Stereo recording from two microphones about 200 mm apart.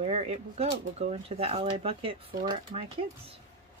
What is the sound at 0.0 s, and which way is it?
Speech, 35° right (ahead or behind).